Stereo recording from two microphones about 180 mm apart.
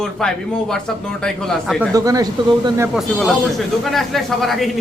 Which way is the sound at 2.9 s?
Centre (ahead or behind).